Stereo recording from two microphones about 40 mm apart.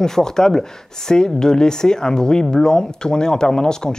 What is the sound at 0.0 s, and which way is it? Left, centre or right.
Speech, centre.